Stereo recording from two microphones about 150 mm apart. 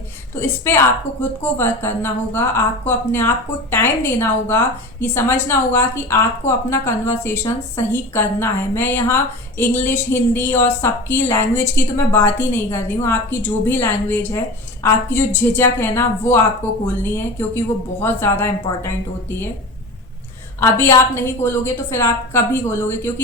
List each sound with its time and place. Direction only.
0.3 s a woman's voice: 15° left (ahead or behind)
20.6 s a woman's voice: 15° left (ahead or behind)